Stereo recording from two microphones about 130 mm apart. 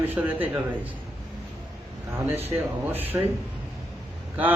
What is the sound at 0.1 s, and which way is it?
Speech, 15° right (ahead or behind).